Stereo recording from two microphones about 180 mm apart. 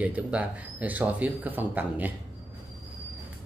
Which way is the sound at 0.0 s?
10° right (ahead or behind).